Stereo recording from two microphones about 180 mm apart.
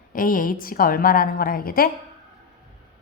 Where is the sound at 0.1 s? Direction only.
50° left (ahead or behind).